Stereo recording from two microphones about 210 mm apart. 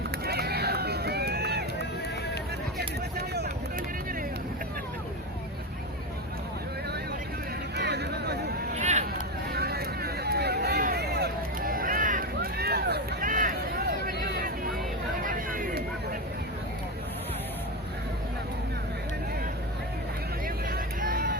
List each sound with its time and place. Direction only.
0.3 s run: 50° right (ahead or behind)
2.7 s a sound: 50° right (ahead or behind)
7.8 s a sound: 50° right (ahead or behind)
8.8 s vehicle: 35° right (ahead or behind)
9.5 s vehicle: 50° right (ahead or behind)
15.2 s chatter: 40° right (ahead or behind)
20.7 s vehicle: 45° right (ahead or behind)